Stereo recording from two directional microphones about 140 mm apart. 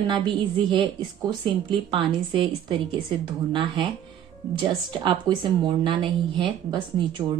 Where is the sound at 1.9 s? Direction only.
35° right (ahead or behind).